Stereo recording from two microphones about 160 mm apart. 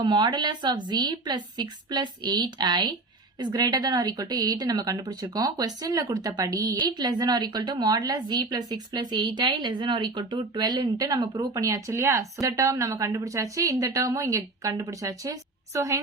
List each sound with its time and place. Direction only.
0.0 s speech: 30° right (ahead or behind)